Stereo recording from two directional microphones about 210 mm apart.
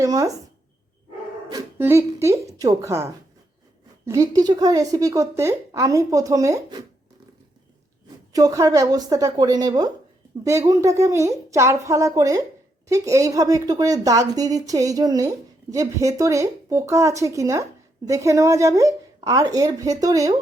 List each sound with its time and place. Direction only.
0.0 s speech: 15° right (ahead or behind)
1.5 s speech: 15° right (ahead or behind)
8.3 s speech: 15° right (ahead or behind)